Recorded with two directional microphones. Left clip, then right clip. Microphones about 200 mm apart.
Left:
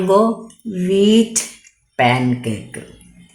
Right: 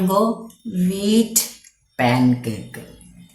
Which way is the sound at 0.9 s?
40° left (ahead or behind).